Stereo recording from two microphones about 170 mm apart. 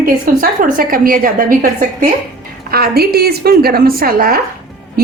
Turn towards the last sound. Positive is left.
turn(degrees=-60)  # may be behind; listen again after turning